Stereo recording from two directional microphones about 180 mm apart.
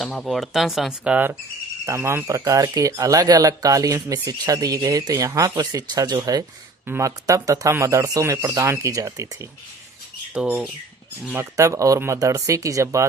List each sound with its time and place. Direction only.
0.0 s speech: centre (ahead or behind); by 9.5 s 15° right (ahead or behind)
10.4 s speech: centre (ahead or behind)
11.3 s speech: 15° right (ahead or behind)